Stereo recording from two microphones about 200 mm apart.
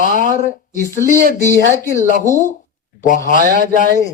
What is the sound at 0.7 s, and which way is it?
Speech, 40° left (ahead or behind).